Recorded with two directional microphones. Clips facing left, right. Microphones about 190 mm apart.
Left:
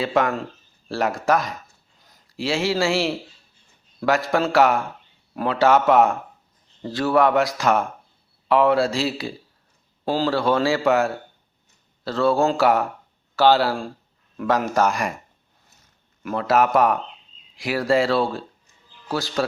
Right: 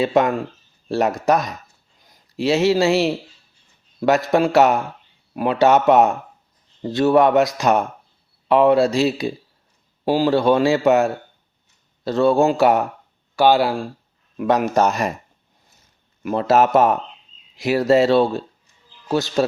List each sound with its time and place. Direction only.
0.0 s a man's voice: 20° right (ahead or behind)
16.2 s a man's voice: 25° right (ahead or behind)